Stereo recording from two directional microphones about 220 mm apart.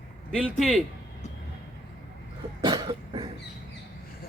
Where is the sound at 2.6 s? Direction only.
20° right (ahead or behind).